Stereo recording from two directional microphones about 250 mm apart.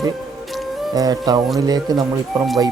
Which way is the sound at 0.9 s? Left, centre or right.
Centre.